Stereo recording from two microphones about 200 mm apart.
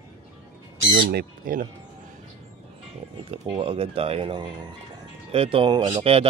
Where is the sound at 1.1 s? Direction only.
45° right (ahead or behind).